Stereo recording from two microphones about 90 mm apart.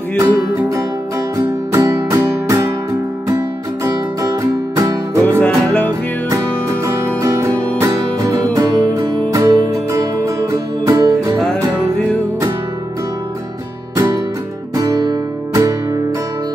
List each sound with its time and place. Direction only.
0.2 s music: 35° right (ahead or behind)
5.4 s music: 15° left (ahead or behind)
6.3 s music: 35° right (ahead or behind)
13.9 s music: 35° right (ahead or behind)